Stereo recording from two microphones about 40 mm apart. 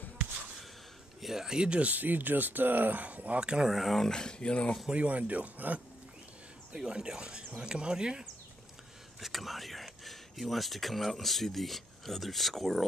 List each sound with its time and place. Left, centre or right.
1.2 s speech: centre
1.8 s speech: right
3.3 s speech: right
3.6 s speech: centre
4.0 s speech: centre
4.9 s speech: right
6.7 s speech: right
9.2 s speech: centre